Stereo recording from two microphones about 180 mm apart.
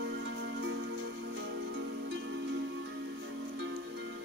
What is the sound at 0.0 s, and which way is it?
Music, 75° right (ahead or behind).